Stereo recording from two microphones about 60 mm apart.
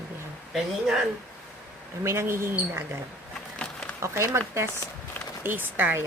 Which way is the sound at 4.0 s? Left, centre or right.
Right.